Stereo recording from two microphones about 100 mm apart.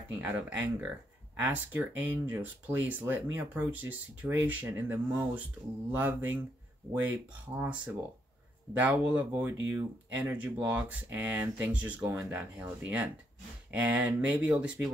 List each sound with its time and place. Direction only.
0.2 s speech: 15° right (ahead or behind)